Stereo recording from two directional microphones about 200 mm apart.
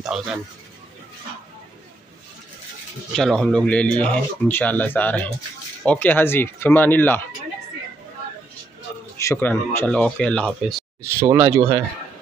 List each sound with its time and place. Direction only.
0.0 s speech: 5° right (ahead or behind)
3.1 s speech: centre (ahead or behind)
9.2 s speech: 10° left (ahead or behind)
11.0 s speech: 10° right (ahead or behind)